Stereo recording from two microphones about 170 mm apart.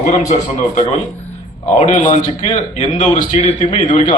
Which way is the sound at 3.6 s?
30° left (ahead or behind).